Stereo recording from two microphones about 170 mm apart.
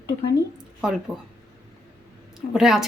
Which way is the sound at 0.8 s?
5° right (ahead or behind).